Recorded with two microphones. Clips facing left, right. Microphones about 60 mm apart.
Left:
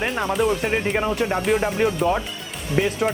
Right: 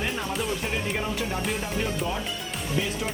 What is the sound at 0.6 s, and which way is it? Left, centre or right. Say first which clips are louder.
Speech: left 7 dB; left.